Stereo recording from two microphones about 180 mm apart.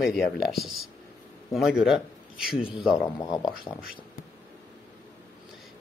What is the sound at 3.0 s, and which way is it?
Speech, 20° left (ahead or behind).